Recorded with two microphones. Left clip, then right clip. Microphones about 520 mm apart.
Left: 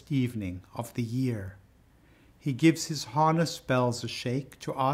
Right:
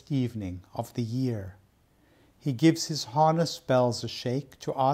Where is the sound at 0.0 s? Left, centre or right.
Right.